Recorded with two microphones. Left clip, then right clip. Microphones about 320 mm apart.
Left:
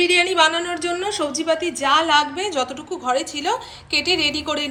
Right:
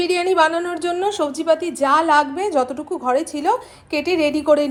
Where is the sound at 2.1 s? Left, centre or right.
Right.